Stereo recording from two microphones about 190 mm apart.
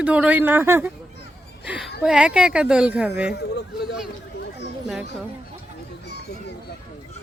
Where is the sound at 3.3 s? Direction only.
60° left (ahead or behind).